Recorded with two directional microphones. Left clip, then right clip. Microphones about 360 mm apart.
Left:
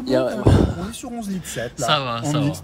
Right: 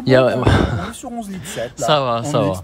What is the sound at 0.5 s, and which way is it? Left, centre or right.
Speech, centre.